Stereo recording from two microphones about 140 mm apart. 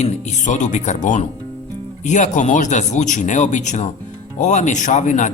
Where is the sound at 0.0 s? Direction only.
60° left (ahead or behind).